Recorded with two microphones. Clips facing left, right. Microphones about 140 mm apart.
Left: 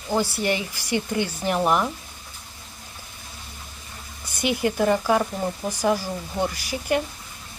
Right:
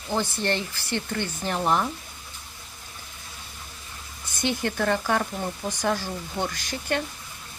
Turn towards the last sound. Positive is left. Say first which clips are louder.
# left 4 dB
turn(degrees=10)  # may be behind; listen again after turning